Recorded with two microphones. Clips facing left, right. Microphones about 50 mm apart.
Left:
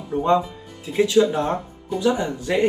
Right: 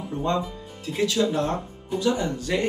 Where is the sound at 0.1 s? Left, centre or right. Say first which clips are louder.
Left 7 dB; centre.